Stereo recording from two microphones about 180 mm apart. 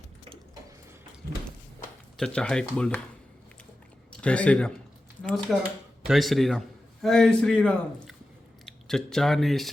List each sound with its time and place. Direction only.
2.1 s a man's voice: 5° left (ahead or behind)
4.2 s a man's voice: 5° left (ahead or behind)